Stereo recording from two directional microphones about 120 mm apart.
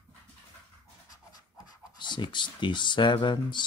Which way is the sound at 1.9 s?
40° left (ahead or behind).